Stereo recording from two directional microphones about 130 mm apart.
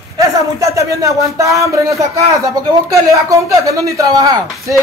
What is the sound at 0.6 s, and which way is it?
Speech, 25° right (ahead or behind).